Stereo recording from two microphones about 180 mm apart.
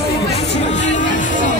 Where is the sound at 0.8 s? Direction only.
45° left (ahead or behind).